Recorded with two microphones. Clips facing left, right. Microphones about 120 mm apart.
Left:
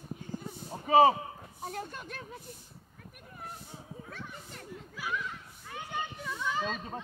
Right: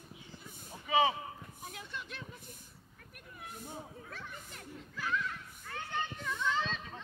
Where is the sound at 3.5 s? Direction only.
50° right (ahead or behind).